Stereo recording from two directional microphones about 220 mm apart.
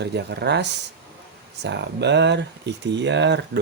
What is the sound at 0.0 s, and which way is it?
Speech, 50° right (ahead or behind).